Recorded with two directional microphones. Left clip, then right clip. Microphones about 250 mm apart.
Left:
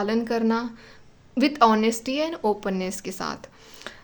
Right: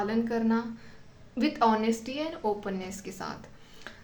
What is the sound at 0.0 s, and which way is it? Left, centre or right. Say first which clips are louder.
A woman's voice: left 5 dB; left.